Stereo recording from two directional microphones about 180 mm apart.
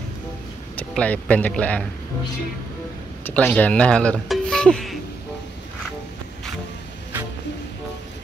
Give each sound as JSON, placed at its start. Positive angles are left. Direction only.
{"t": 0.7, "sound": "speech", "side_deg": 10}
{"t": 3.3, "sound": "speech", "side_deg": 10}